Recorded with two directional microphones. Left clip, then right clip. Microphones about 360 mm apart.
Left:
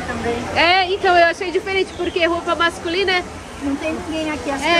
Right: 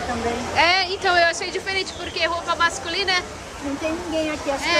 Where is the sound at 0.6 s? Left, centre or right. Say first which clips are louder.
Left 3 dB; centre.